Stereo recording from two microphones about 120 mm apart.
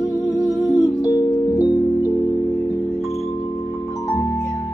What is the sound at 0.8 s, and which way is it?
Music, 25° left (ahead or behind).